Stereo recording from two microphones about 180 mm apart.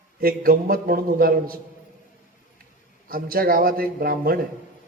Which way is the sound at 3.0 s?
55° right (ahead or behind).